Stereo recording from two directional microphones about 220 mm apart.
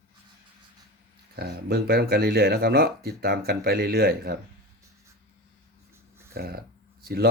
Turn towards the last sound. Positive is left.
turn(degrees=-45)  # may be behind; listen again after turning